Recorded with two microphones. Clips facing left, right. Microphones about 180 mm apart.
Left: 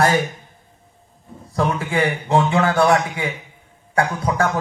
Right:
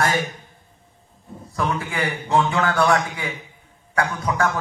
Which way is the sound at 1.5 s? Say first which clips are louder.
Left 4 dB; 30° left (ahead or behind).